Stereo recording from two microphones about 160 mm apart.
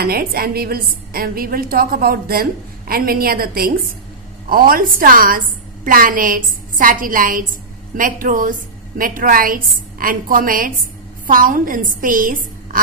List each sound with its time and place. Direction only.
0.0 s a woman's voice: 70° right (ahead or behind)